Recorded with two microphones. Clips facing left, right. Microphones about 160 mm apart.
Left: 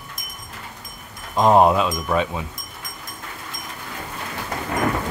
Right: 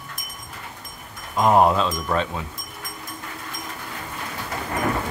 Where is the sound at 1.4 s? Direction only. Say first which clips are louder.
Left 2 dB; 20° left (ahead or behind).